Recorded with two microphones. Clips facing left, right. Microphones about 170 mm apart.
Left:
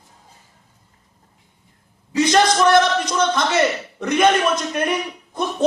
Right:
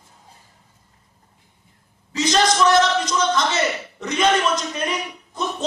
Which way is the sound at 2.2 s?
55° left (ahead or behind).